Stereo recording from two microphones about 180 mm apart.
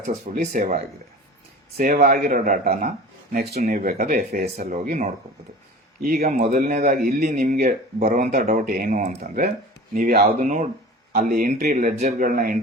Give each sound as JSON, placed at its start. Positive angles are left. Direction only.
{"t": 0.1, "sound": "speech", "side_deg": -45}
{"t": 1.8, "sound": "speech", "side_deg": -50}
{"t": 3.3, "sound": "speech", "side_deg": -60}
{"t": 3.6, "sound": "speech", "side_deg": -50}
{"t": 10.2, "sound": "speech", "side_deg": -40}